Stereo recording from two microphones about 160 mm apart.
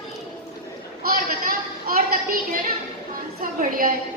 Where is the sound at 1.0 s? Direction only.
65° right (ahead or behind).